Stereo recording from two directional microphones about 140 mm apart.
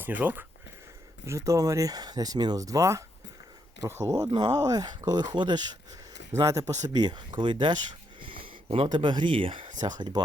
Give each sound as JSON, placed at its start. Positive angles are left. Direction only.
{"t": 0.0, "sound": "speech", "side_deg": -10}